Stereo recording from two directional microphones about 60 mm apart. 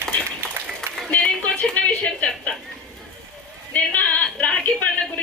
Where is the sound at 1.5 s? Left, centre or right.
Centre.